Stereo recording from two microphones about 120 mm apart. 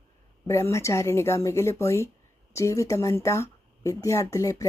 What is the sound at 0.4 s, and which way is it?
Speech, 25° left (ahead or behind).